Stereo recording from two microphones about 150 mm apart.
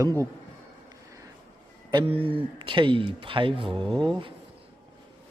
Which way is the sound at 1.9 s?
35° right (ahead or behind).